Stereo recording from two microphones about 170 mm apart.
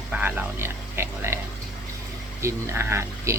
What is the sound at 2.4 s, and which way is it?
Speech, 15° right (ahead or behind).